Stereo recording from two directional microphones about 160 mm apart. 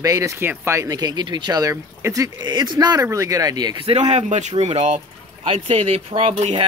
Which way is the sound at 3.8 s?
45° right (ahead or behind).